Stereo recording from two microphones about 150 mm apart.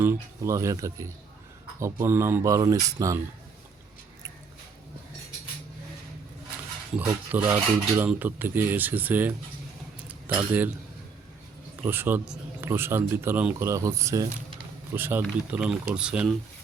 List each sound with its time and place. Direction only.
0.0 s speech: 15° right (ahead or behind)
7.3 s speech: 15° right (ahead or behind)
10.1 s chink: 10° right (ahead or behind)
11.8 s a man's voice: 15° right (ahead or behind)